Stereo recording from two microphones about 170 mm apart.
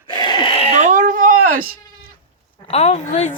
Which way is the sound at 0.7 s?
45° right (ahead or behind).